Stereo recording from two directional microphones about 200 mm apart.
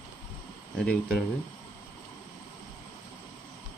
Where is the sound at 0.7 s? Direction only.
5° left (ahead or behind).